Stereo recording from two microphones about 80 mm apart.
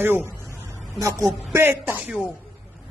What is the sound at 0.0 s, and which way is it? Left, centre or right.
Speech, right.